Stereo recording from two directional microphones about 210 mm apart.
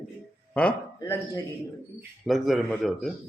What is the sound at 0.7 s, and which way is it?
Speech, 15° left (ahead or behind).